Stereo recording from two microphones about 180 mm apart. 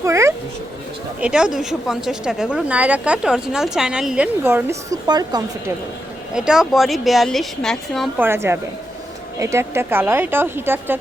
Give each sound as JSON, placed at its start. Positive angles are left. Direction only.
{"t": 0.0, "sound": "cat", "side_deg": -15}
{"t": 1.2, "sound": "speech", "side_deg": -5}
{"t": 6.3, "sound": "speech", "side_deg": -5}
{"t": 8.2, "sound": "speech", "side_deg": -15}